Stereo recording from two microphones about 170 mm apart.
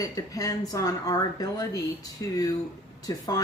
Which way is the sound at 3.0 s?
20° left (ahead or behind).